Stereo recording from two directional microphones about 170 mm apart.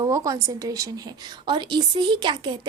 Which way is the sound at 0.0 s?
20° right (ahead or behind).